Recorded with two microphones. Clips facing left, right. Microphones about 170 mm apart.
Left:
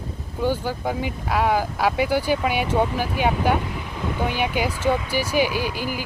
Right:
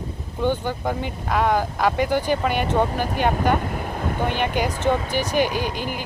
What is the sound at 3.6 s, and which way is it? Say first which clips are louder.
Boat: right 2 dB; 50° right (ahead or behind).